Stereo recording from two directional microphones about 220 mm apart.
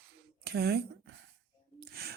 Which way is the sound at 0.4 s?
45° right (ahead or behind).